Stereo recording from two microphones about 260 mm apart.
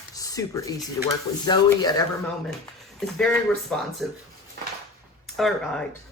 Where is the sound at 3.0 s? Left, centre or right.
Centre.